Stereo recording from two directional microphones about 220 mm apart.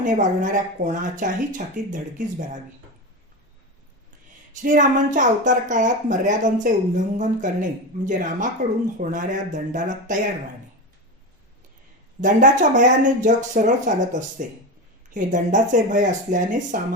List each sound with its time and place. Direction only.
0.0 s speech: 35° right (ahead or behind)
4.6 s speech: 35° right (ahead or behind)
12.2 s speech: 35° right (ahead or behind)